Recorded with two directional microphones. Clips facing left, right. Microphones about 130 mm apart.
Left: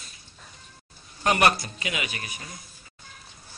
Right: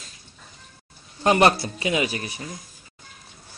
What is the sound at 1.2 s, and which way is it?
A man's voice, 25° right (ahead or behind).